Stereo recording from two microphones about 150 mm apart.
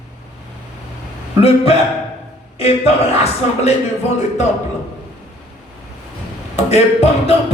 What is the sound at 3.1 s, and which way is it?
Music, 45° left (ahead or behind).